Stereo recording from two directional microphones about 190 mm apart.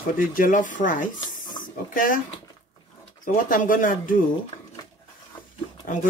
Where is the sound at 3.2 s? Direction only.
45° left (ahead or behind).